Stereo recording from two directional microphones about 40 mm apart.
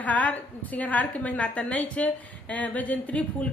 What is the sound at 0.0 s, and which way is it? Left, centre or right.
A woman's voice, left.